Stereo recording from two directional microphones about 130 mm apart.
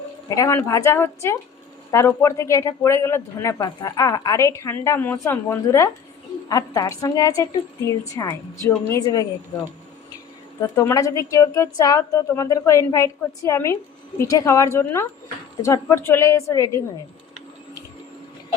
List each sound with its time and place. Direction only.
0.3 s speech: 25° left (ahead or behind)
10.6 s speech: 25° left (ahead or behind)